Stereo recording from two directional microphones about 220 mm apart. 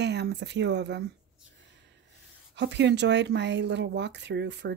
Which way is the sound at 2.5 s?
55° right (ahead or behind).